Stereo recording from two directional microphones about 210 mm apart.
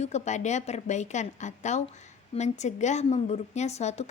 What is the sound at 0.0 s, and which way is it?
Speech, 35° left (ahead or behind).